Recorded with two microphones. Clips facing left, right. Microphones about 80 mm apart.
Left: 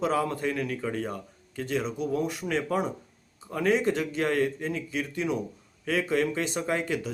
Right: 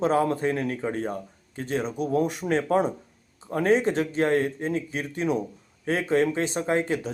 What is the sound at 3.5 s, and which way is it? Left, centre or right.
Speech, right.